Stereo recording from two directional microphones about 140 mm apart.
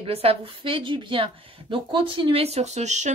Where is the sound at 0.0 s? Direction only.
45° right (ahead or behind).